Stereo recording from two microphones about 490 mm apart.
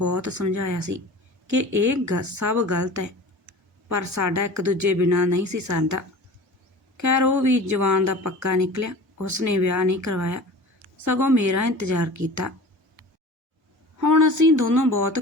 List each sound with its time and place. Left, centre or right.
0.0 s speech: right
14.0 s speech: right